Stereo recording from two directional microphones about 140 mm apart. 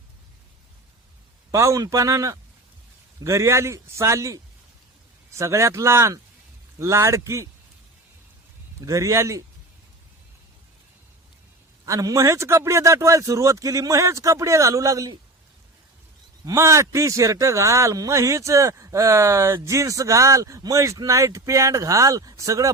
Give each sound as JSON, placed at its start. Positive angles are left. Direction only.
{"t": 1.5, "sound": "a man's voice", "side_deg": -20}
{"t": 8.8, "sound": "a man's voice", "side_deg": -25}
{"t": 11.9, "sound": "a man's voice", "side_deg": -25}
{"t": 16.5, "sound": "a man's voice", "side_deg": -20}